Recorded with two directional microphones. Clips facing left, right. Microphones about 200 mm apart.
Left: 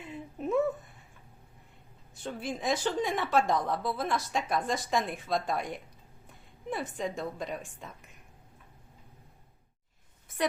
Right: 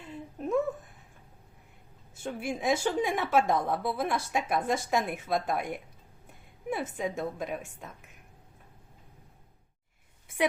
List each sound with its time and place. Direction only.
0.0 s a sound: 5° left (ahead or behind)
2.2 s a woman's voice: 10° right (ahead or behind)
6.7 s speech: 5° right (ahead or behind)